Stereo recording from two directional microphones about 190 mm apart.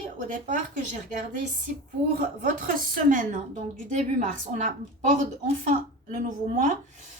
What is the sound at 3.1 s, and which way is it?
A woman's voice, 40° right (ahead or behind).